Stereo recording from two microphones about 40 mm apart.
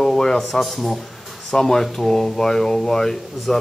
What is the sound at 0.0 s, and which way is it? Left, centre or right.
Speech, centre.